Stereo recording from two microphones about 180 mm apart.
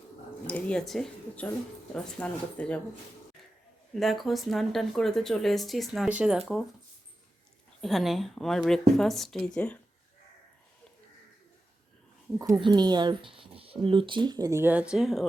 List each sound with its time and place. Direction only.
0.4 s speech: 5° left (ahead or behind)
4.0 s speech: centre (ahead or behind)
7.8 s speech: centre (ahead or behind)
12.4 s speech: 20° right (ahead or behind); by 15.2 s centre (ahead or behind)